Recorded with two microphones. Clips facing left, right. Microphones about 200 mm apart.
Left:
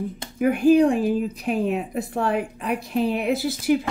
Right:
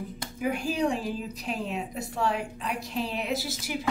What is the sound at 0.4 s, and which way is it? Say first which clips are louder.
A woman's voice: left 11 dB; 55° left (ahead or behind).